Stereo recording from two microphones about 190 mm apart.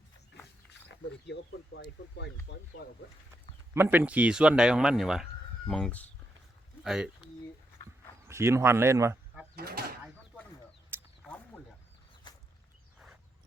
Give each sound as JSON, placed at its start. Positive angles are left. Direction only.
{"t": 0.9, "sound": "speech", "side_deg": 65}
{"t": 3.8, "sound": "speech", "side_deg": -10}
{"t": 8.3, "sound": "speech", "side_deg": -15}
{"t": 9.6, "sound": "speech", "side_deg": -55}
{"t": 12.3, "sound": "a sound", "side_deg": 20}